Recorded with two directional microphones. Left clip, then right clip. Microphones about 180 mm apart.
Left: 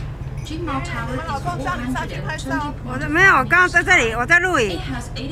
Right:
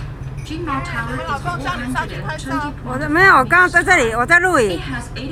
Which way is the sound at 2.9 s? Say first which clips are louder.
Right 3 dB; 20° right (ahead or behind).